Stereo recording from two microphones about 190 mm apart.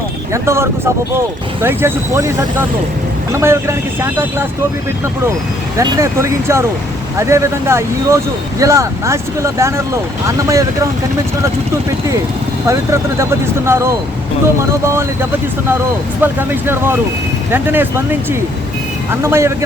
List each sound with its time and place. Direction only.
0.4 s speech: 15° right (ahead or behind)
5.7 s speech: 15° right (ahead or behind)
12.6 s speech: 15° right (ahead or behind)
16.2 s speech: 10° right (ahead or behind)